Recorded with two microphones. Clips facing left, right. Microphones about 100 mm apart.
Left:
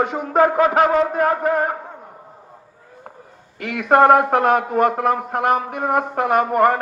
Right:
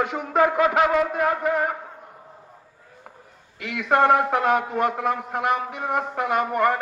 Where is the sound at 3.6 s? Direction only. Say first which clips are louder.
Left 6 dB; 50° left (ahead or behind).